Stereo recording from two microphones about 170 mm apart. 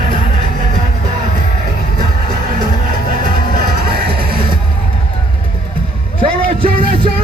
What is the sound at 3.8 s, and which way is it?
Music, 65° right (ahead or behind).